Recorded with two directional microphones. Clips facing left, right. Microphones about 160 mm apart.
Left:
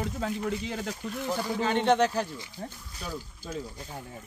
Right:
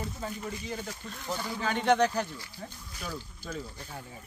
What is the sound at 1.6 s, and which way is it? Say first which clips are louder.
Speech: left 1 dB; 25° left (ahead or behind).